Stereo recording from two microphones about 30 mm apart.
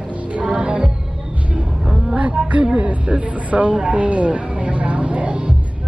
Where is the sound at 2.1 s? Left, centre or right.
Right.